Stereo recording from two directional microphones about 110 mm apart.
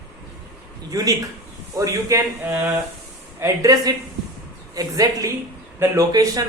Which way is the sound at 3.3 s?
30° right (ahead or behind).